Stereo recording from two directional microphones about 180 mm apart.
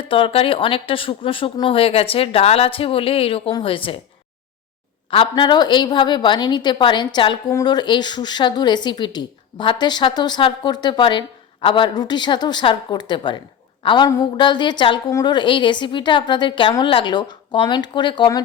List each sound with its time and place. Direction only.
0.0 s speech: 30° left (ahead or behind)
5.1 s speech: 25° left (ahead or behind)